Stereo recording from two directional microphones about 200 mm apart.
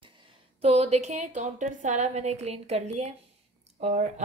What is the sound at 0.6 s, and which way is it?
Speech, 30° right (ahead or behind).